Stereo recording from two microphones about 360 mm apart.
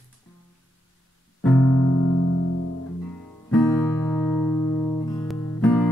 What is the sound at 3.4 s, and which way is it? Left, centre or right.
Music, centre.